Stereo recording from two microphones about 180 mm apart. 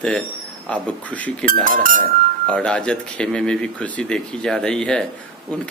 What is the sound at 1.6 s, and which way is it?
Speech, 50° right (ahead or behind).